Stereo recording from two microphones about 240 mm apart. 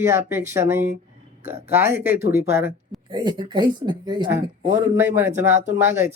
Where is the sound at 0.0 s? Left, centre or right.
Centre.